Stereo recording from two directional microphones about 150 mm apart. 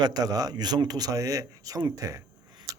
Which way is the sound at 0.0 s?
25° right (ahead or behind).